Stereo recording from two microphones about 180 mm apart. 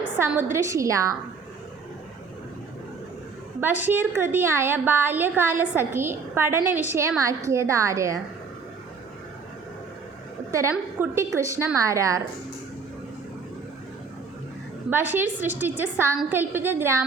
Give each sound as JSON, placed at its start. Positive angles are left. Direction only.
{"t": 0.2, "sound": "a woman's voice", "side_deg": -10}
{"t": 3.6, "sound": "a woman's voice", "side_deg": -10}
{"t": 10.5, "sound": "a woman's voice", "side_deg": -15}
{"t": 14.8, "sound": "a woman's voice", "side_deg": -10}